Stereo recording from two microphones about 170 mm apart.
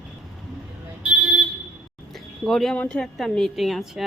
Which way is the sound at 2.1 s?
Centre (ahead or behind).